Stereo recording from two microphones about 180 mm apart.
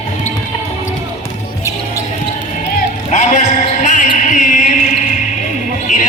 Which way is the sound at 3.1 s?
40° left (ahead or behind).